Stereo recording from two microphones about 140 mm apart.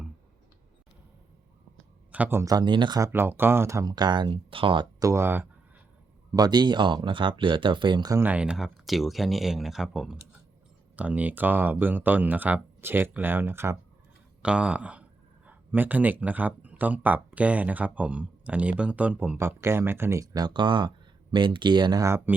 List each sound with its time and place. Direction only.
2.1 s speech: 10° right (ahead or behind)
2.4 s speech: 30° right (ahead or behind)
3.1 s speech: 15° right (ahead or behind); by 5.0 s 35° right (ahead or behind)
5.0 s speech: 20° right (ahead or behind)
6.3 s speech: 30° right (ahead or behind)
8.2 s speech: 10° right (ahead or behind)